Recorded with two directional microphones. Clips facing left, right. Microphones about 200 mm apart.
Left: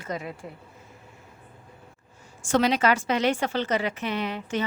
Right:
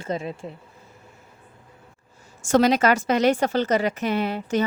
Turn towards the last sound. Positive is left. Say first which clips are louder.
# right 5 dB
turn(degrees=-40)  # may be behind; listen again after turning